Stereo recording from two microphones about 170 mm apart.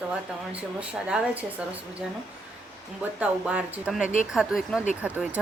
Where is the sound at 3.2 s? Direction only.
5° right (ahead or behind).